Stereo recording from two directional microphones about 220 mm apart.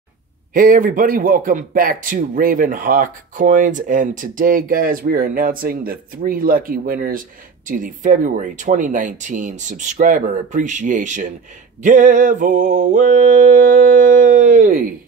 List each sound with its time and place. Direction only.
0.5 s a man's voice: 40° right (ahead or behind)